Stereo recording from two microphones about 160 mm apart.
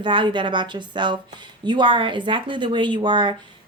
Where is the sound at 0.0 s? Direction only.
30° right (ahead or behind).